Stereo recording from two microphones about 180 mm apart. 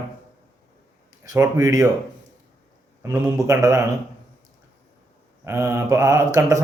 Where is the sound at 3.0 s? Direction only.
15° right (ahead or behind).